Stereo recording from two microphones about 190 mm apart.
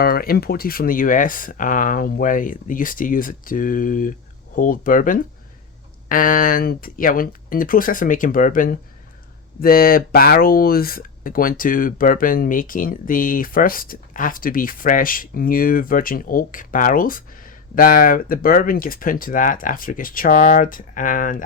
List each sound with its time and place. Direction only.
0.0 s speech: 50° left (ahead or behind)